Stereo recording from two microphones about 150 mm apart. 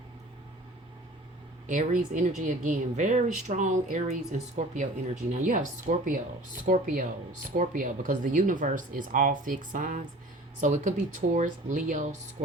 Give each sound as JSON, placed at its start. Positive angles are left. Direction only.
{"t": 1.6, "sound": "speech", "side_deg": -60}